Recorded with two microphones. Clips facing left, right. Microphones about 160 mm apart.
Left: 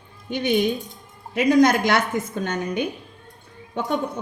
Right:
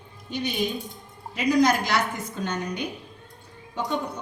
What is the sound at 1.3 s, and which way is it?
A woman's voice, 55° left (ahead or behind).